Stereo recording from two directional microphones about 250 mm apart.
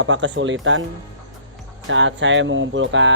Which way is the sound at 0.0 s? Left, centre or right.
Right.